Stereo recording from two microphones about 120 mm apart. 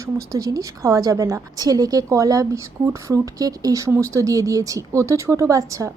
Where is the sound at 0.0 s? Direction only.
25° right (ahead or behind).